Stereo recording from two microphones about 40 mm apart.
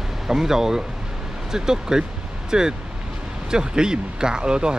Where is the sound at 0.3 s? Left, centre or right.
Centre.